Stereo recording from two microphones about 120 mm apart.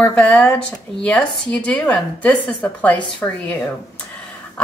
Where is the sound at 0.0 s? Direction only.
15° left (ahead or behind).